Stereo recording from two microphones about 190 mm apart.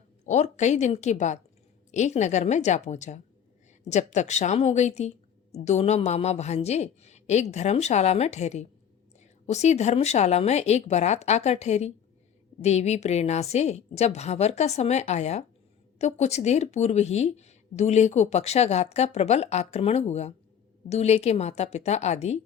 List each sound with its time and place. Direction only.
0.3 s a woman's voice: 40° left (ahead or behind)